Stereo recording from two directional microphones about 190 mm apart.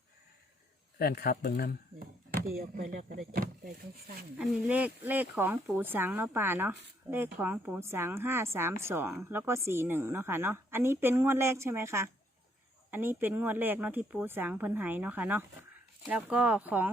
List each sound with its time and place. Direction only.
0.9 s speech: 55° left (ahead or behind)
2.3 s speech: 50° right (ahead or behind)
4.4 s speech: 10° right (ahead or behind)